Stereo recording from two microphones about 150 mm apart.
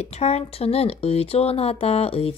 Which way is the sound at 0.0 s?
45° left (ahead or behind).